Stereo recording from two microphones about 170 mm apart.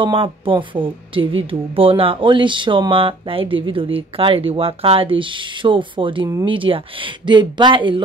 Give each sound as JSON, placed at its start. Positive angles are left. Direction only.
{"t": 0.0, "sound": "speech", "side_deg": -30}